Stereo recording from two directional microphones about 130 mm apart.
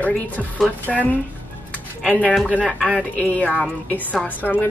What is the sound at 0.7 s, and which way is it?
Speech, 10° left (ahead or behind).